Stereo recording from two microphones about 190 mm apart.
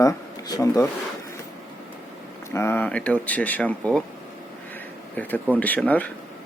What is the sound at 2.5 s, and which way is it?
Speech, 15° left (ahead or behind).